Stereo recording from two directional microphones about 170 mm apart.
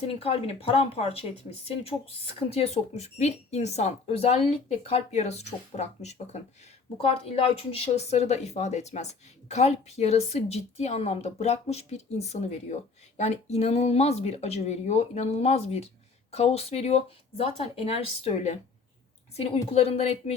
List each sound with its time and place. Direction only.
0.0 s speech: 35° left (ahead or behind)